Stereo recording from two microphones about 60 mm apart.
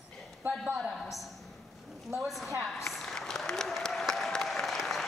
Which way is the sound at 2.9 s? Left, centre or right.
Centre.